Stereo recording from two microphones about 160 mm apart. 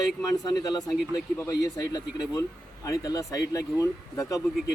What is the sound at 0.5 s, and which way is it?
Speech, 20° left (ahead or behind).